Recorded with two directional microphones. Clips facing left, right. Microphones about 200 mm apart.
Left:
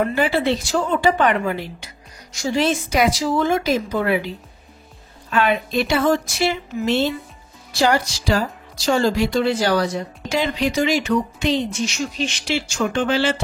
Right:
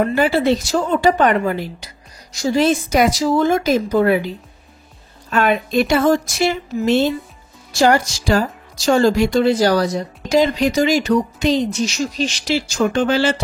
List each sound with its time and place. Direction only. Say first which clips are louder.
0.1 s speech: right 4 dB; 40° right (ahead or behind)
5.3 s speech: right 3 dB; 45° right (ahead or behind)